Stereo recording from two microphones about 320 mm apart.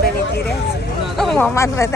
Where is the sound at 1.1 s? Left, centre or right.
Centre.